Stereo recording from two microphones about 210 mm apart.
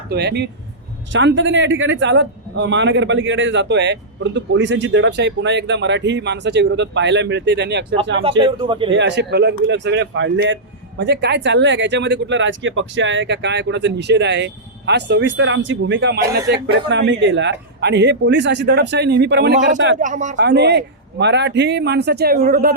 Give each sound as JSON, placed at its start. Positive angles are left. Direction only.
{"t": 0.1, "sound": "speech", "side_deg": -55}
{"t": 8.2, "sound": "speech", "side_deg": -25}
{"t": 8.9, "sound": "speech", "side_deg": -55}
{"t": 19.5, "sound": "speech", "side_deg": -35}
{"t": 20.3, "sound": "speech", "side_deg": -55}